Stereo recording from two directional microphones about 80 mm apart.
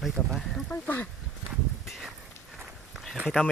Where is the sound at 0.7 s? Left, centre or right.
Centre.